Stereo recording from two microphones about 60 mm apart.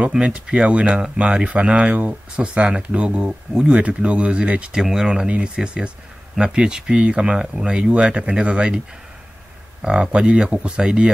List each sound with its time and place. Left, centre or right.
0.1 s speech: centre